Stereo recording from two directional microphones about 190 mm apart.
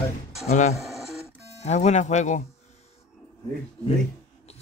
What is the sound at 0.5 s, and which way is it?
Speech, 40° left (ahead or behind).